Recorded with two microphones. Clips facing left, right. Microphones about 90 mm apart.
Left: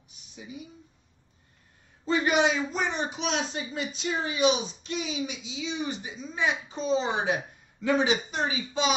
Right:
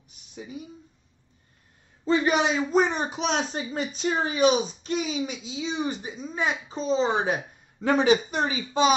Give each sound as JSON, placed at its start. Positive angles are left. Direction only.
{"t": 2.0, "sound": "a man's voice", "side_deg": -35}